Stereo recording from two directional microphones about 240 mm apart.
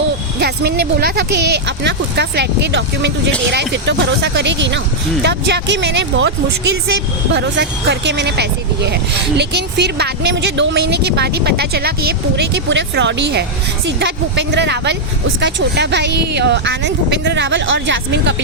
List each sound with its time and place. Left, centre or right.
0.3 s speech: right
7.3 s speech: right